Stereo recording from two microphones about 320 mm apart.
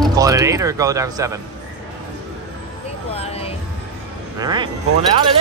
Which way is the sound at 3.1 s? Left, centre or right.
Centre.